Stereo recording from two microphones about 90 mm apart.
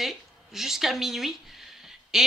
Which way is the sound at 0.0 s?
5° right (ahead or behind).